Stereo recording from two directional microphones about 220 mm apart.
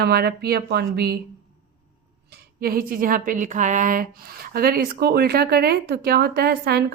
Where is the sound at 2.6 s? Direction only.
40° right (ahead or behind).